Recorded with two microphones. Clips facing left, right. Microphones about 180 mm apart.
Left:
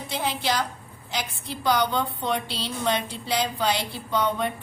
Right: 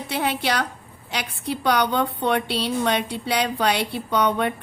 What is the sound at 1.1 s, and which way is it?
A woman's voice, 70° right (ahead or behind).